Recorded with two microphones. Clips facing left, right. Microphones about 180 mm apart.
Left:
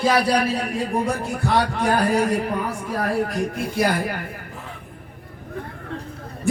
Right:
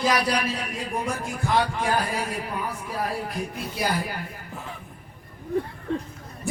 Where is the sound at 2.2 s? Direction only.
45° left (ahead or behind).